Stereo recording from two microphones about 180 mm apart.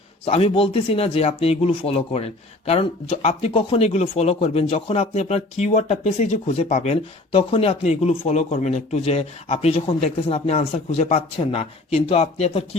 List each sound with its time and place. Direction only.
0.3 s speech: 35° left (ahead or behind)